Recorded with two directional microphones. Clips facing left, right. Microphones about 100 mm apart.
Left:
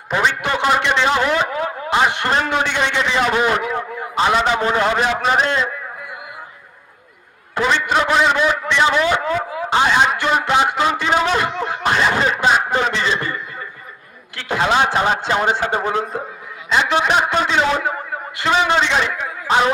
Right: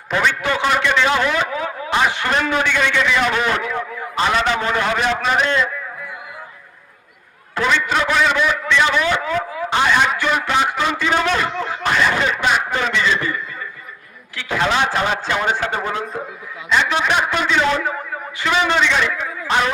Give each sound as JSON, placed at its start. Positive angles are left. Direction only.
{"t": 0.1, "sound": "a man's voice", "side_deg": 25}
{"t": 7.5, "sound": "a man's voice", "side_deg": 20}
{"t": 9.8, "sound": "a sound", "side_deg": 30}
{"t": 11.9, "sound": "snicker", "side_deg": 30}
{"t": 12.5, "sound": "a sound", "side_deg": 30}
{"t": 14.5, "sound": "a man's voice", "side_deg": 25}
{"t": 17.6, "sound": "a man's voice", "side_deg": 20}
{"t": 19.5, "sound": "a man's voice", "side_deg": 20}